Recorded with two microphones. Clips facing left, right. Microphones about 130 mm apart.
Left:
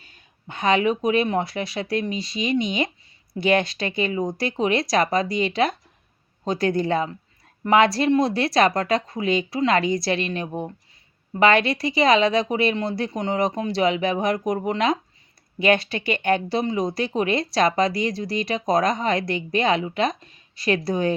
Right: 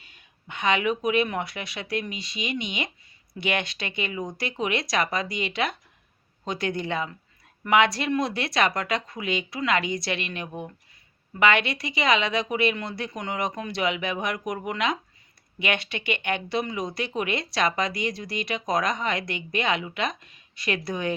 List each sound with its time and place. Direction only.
0.0 s speech: 35° left (ahead or behind)